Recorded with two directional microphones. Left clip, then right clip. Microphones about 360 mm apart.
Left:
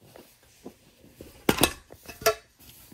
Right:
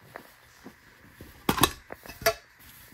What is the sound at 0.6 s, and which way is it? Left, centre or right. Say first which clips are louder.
Vehicle: left 4 dB; centre.